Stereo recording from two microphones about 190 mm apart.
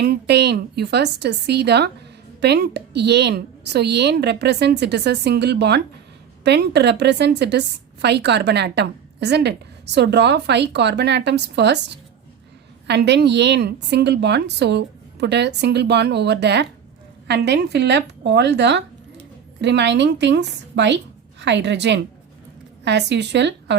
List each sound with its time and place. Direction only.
0.0 s a woman's voice: 60° right (ahead or behind)